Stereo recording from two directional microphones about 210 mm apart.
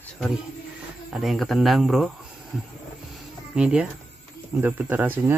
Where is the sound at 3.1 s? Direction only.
5° right (ahead or behind).